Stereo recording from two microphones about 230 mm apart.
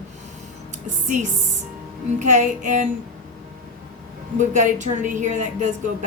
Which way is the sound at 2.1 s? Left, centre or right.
Right.